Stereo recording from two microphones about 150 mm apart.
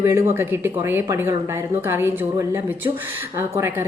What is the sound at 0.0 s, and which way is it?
A woman's voice, 15° right (ahead or behind).